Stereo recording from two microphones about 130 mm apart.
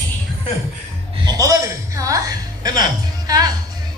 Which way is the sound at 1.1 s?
35° right (ahead or behind).